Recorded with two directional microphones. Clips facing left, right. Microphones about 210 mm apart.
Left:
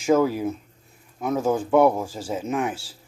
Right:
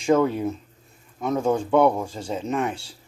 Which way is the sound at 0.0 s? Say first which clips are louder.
Even; 5° left (ahead or behind).